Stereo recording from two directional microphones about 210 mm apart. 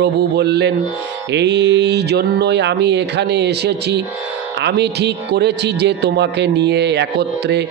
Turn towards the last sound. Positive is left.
turn(degrees=-55)  # may be behind; listen again after turning